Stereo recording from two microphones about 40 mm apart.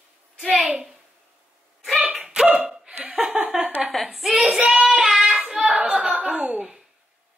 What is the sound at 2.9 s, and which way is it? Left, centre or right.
Speech, right.